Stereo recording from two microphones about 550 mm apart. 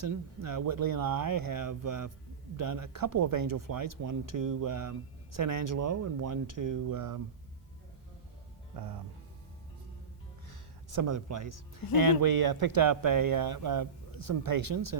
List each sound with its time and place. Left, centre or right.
0.0 s speech: right
8.7 s music: right
10.5 s speech: right